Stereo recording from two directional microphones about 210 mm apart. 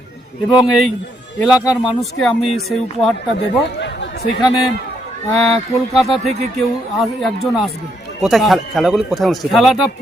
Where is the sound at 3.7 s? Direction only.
55° left (ahead or behind).